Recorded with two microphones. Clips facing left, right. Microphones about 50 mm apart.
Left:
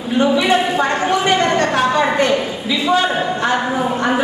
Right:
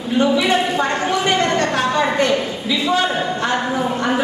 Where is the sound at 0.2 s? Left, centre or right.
Centre.